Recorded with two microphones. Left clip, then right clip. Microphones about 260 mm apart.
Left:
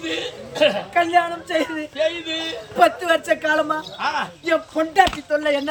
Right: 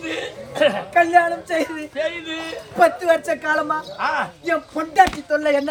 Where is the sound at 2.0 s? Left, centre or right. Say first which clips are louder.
Left 3 dB; centre.